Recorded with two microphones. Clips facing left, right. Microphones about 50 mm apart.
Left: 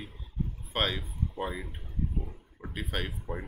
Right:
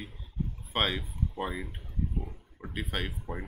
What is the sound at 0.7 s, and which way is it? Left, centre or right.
Speech, centre.